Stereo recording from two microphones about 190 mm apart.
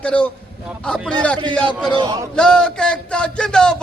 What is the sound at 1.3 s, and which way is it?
Speech, 25° right (ahead or behind).